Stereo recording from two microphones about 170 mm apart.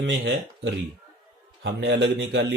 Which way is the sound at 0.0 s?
90° right.